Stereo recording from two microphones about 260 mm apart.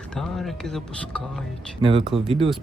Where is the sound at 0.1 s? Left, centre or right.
Centre.